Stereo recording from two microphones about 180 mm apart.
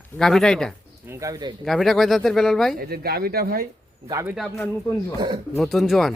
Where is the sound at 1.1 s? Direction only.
20° right (ahead or behind).